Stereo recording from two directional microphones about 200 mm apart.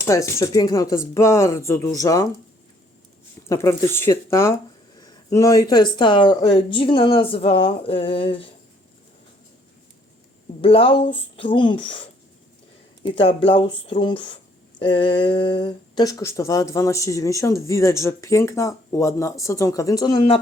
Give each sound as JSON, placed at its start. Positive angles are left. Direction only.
{"t": 0.0, "sound": "speech", "side_deg": 15}
{"t": 3.5, "sound": "speech", "side_deg": 15}
{"t": 10.6, "sound": "speech", "side_deg": 30}